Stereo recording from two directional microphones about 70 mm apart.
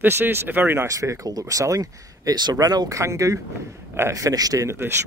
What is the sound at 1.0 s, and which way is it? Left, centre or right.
A man's voice, right.